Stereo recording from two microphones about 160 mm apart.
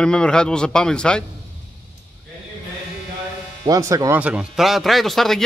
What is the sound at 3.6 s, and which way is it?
Speech, 20° right (ahead or behind).